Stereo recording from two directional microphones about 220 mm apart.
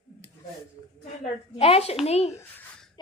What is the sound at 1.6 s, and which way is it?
Speech, 25° left (ahead or behind).